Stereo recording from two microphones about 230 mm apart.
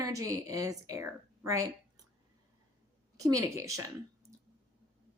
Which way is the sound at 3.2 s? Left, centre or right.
Centre.